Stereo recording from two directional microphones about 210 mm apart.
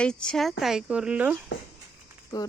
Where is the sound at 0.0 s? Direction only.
5° left (ahead or behind).